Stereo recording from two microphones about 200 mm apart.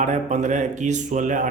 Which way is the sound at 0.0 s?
35° right (ahead or behind).